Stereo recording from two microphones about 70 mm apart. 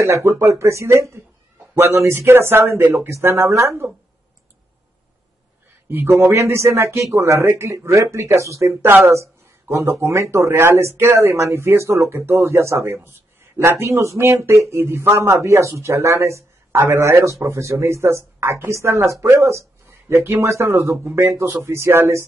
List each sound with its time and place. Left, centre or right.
0.0 s speech: right
5.9 s speech: right
8.8 s speech: right
9.1 s speech: right